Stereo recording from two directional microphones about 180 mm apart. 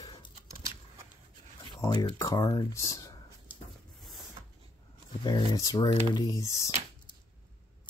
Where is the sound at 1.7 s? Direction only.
20° left (ahead or behind).